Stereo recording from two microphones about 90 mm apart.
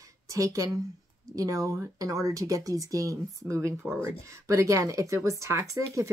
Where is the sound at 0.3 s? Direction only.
35° right (ahead or behind).